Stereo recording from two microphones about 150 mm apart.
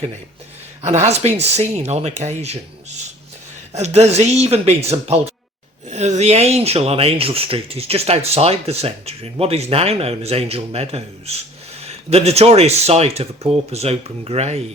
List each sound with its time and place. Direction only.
0.8 s speech: 45° right (ahead or behind)